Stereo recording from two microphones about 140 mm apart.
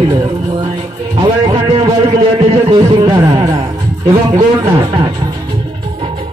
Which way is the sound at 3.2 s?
20° right (ahead or behind).